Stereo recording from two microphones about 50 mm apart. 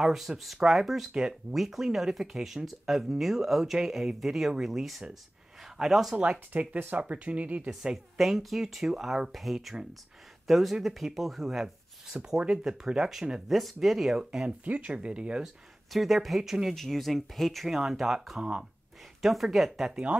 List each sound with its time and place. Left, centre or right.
0.0 s speech: centre
6.5 s speech: right
7.9 s speech: centre
13.5 s speech: centre
14.6 s speech: right
15.4 s speech: centre
16.7 s speech: centre
19.2 s speech: centre